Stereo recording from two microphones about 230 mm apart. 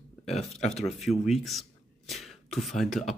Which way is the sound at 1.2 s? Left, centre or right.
Centre.